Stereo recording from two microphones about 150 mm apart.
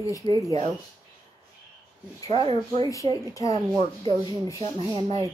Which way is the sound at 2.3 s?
40° right (ahead or behind).